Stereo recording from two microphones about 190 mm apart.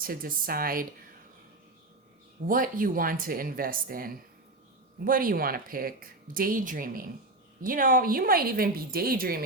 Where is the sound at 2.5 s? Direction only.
45° right (ahead or behind).